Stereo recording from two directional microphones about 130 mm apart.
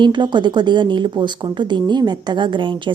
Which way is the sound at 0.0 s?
35° right (ahead or behind).